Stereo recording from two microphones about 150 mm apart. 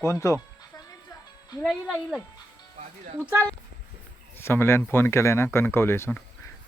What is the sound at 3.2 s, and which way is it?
Speech, 15° right (ahead or behind).